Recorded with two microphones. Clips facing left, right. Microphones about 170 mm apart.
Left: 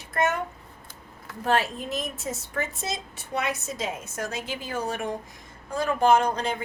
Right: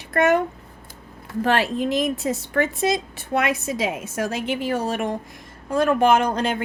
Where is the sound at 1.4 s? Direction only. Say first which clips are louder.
Right 4 dB; 80° right.